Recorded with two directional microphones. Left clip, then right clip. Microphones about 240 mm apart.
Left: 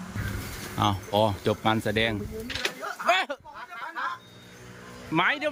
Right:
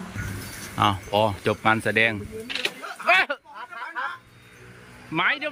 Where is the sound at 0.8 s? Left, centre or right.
Centre.